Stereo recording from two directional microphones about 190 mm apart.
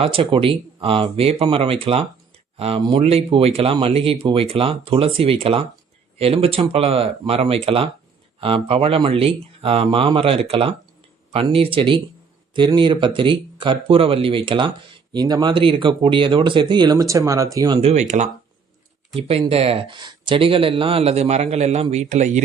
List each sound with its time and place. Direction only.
0.0 s speech: 30° right (ahead or behind)
17.7 s speech: 35° right (ahead or behind)